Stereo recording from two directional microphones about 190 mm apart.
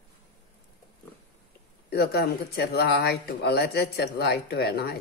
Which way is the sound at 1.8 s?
55° left (ahead or behind).